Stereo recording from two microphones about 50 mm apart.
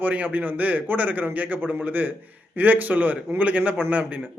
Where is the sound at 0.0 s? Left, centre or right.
Right.